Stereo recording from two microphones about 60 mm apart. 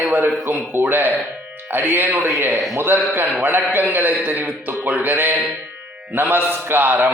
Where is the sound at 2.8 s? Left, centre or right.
Right.